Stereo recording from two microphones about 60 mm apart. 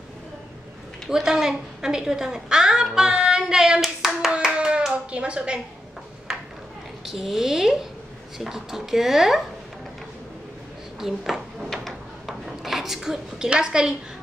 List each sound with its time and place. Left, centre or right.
1.2 s a woman's voice: centre
4.3 s hands: centre
4.9 s speech: centre
6.3 s a sound: centre
7.1 s speech: centre
11.0 s speech: centre
11.7 s a sound: centre